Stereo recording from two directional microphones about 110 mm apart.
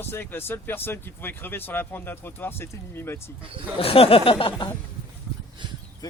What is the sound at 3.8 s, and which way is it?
Speech, 60° left (ahead or behind).